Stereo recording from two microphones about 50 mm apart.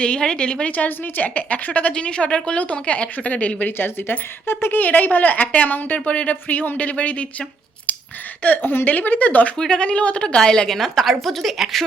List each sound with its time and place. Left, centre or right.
0.0 s a woman's voice: centre
0.8 s a woman's voice: left
1.9 s a woman's voice: centre
3.7 s speech: left
8.4 s speech: left
9.6 s a woman's voice: centre
10.8 s a woman's voice: centre